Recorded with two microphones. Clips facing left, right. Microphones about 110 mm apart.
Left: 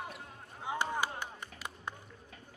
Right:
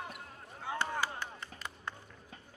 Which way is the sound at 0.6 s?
15° left (ahead or behind).